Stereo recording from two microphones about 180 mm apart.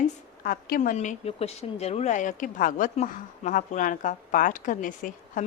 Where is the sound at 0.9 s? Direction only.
40° left (ahead or behind).